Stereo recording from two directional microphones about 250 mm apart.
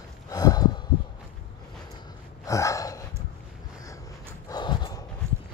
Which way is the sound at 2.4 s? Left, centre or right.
Centre.